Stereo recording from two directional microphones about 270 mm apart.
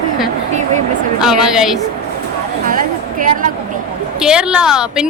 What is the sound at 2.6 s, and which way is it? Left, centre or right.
Speech, right.